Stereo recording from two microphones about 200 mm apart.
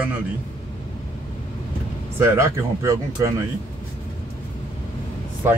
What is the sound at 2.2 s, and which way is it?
Speech, 15° right (ahead or behind).